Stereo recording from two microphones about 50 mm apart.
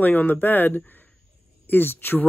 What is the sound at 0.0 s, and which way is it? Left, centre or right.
Speech, left.